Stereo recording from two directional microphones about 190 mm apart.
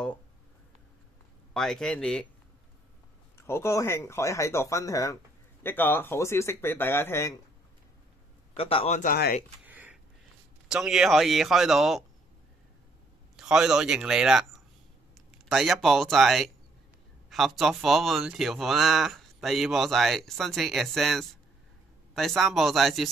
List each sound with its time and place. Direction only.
1.5 s speech: centre (ahead or behind)
3.3 s speech: 15° left (ahead or behind)
8.5 s speech: 30° left (ahead or behind); by 9.4 s 50° left (ahead or behind)
9.7 s a sound: 10° right (ahead or behind)
10.7 s speech: 5° right (ahead or behind)
13.4 s speech: 5° right (ahead or behind)